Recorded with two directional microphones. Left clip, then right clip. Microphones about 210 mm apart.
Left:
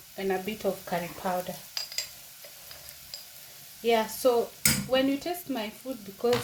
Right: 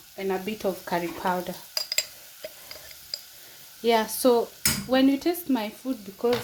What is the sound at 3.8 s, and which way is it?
Stir, 40° right (ahead or behind).